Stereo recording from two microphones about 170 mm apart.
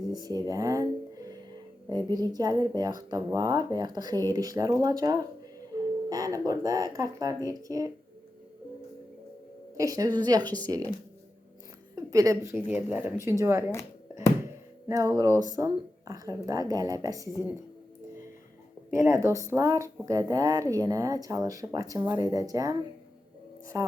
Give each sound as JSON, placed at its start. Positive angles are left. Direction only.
{"t": 0.1, "sound": "speech", "side_deg": -25}
{"t": 9.7, "sound": "speech", "side_deg": -20}
{"t": 11.9, "sound": "a woman's voice", "side_deg": -20}
{"t": 14.8, "sound": "speech", "side_deg": -20}
{"t": 18.9, "sound": "speech", "side_deg": -15}
{"t": 23.7, "sound": "speech", "side_deg": -20}